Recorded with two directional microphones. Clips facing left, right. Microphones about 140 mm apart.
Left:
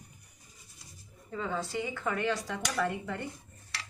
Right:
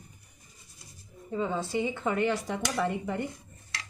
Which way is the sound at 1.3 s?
20° right (ahead or behind).